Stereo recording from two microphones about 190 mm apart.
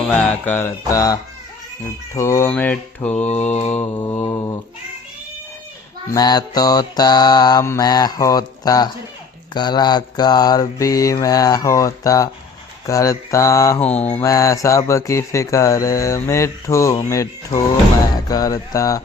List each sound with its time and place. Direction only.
0.1 s speech: 10° left (ahead or behind)
3.2 s mantra: 35° left (ahead or behind)
3.7 s speech: 10° left (ahead or behind)
6.1 s mantra: 20° left (ahead or behind)
12.8 s speech: 15° left (ahead or behind)
18.3 s mantra: 20° left (ahead or behind)